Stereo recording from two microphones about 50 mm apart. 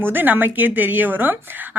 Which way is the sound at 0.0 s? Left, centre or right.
Right.